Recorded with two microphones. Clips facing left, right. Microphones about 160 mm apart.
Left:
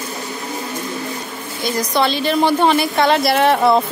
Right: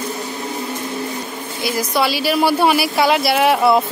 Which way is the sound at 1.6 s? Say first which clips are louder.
Left 1 dB; 5° right (ahead or behind).